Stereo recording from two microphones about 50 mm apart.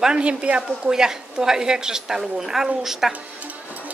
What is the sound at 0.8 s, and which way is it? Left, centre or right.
A woman's voice, centre.